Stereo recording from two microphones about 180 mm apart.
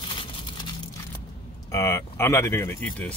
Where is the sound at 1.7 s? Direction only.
15° left (ahead or behind).